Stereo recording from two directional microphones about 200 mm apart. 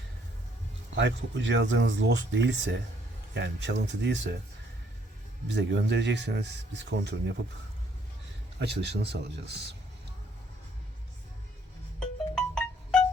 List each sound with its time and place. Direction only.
0.9 s speech: 65° right (ahead or behind)
5.5 s speech: 60° right (ahead or behind)
8.6 s speech: 55° right (ahead or behind)
11.9 s music: 5° left (ahead or behind)